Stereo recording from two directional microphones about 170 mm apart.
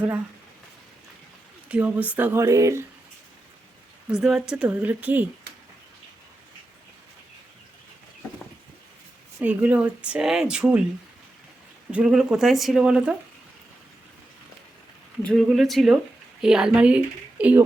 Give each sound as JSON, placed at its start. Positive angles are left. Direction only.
{"t": 1.7, "sound": "speech", "side_deg": -10}
{"t": 4.1, "sound": "speech", "side_deg": -5}
{"t": 9.4, "sound": "speech", "side_deg": -10}
{"t": 11.9, "sound": "a woman's voice", "side_deg": -5}
{"t": 15.2, "sound": "a woman's voice", "side_deg": 0}